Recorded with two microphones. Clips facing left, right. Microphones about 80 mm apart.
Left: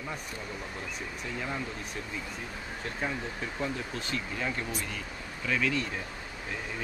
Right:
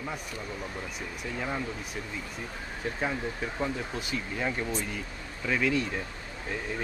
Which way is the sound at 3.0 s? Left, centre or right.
Centre.